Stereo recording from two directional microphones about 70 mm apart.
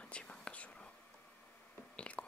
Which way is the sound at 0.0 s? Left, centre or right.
Centre.